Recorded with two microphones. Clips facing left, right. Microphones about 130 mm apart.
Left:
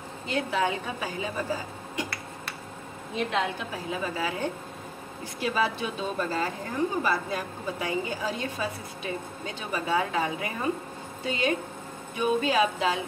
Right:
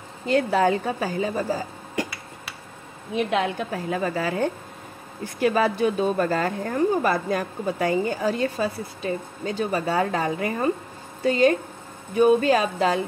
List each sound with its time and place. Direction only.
0.3 s speech: 40° right (ahead or behind)
3.3 s a woman's voice: 55° right (ahead or behind)